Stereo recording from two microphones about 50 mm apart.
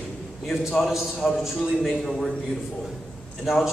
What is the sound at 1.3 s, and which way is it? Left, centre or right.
Speech, centre.